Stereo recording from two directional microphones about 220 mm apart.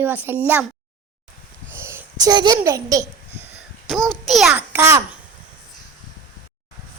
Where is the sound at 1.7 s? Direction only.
10° right (ahead or behind).